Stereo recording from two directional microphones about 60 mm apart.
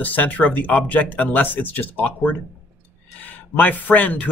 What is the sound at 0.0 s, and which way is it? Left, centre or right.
Speech, left.